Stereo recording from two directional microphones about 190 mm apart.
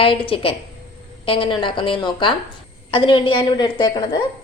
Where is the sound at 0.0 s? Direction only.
30° left (ahead or behind).